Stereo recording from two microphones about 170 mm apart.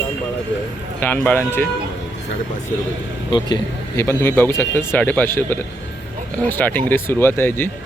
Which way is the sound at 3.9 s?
15° left (ahead or behind).